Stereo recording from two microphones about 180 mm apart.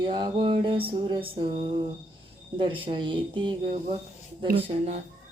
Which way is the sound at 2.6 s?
30° right (ahead or behind).